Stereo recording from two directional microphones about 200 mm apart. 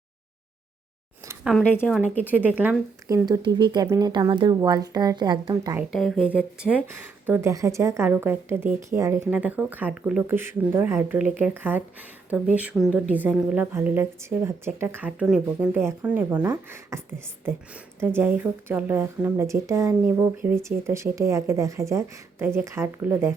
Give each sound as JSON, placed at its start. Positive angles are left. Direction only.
{"t": 1.7, "sound": "speech", "side_deg": 10}
{"t": 2.2, "sound": "a woman's voice", "side_deg": -10}
{"t": 3.2, "sound": "speech", "side_deg": -20}
{"t": 5.9, "sound": "a woman's voice", "side_deg": 0}